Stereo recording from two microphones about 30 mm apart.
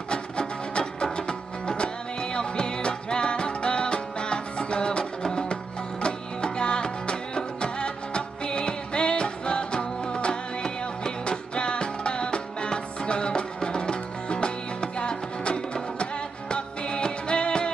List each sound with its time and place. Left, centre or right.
0.1 s music: left